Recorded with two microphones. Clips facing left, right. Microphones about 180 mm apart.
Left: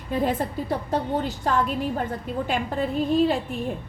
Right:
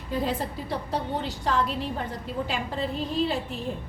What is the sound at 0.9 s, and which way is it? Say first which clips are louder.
A woman's voice: left 4 dB; 50° left (ahead or behind).